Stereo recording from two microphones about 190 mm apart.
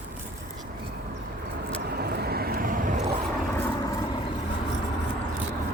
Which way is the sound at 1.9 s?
55° right (ahead or behind).